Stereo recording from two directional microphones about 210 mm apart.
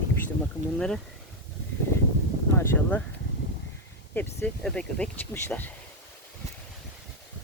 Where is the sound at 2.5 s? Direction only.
10° left (ahead or behind).